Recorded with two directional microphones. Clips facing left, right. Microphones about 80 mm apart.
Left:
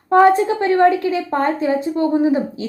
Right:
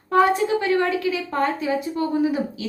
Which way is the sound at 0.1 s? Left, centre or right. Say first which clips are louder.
Left 6 dB; left.